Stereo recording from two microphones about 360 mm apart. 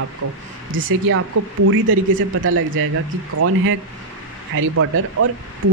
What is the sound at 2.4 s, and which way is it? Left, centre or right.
Speech, right.